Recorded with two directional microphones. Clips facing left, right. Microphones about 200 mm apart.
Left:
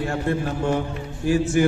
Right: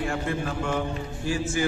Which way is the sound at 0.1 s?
40° left (ahead or behind).